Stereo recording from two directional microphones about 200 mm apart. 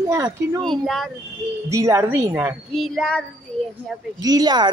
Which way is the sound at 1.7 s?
15° right (ahead or behind).